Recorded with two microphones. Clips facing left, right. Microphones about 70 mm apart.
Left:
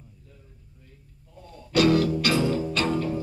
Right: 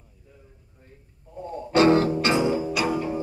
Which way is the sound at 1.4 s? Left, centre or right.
Right.